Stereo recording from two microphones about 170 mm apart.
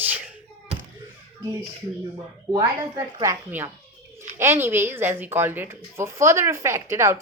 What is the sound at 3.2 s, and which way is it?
Speech, 15° right (ahead or behind).